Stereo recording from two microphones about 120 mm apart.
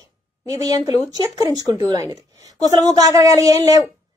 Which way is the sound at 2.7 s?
30° right (ahead or behind).